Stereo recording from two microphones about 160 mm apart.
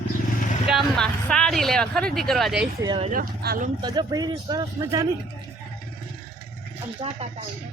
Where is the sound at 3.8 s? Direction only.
25° right (ahead or behind).